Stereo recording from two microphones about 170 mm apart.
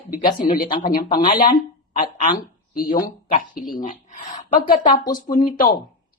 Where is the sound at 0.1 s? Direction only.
60° left (ahead or behind).